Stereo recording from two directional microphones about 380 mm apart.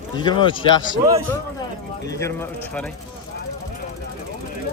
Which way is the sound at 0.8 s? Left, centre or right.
Centre.